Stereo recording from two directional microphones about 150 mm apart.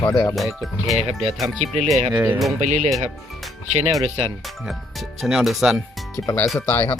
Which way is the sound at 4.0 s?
40° right (ahead or behind).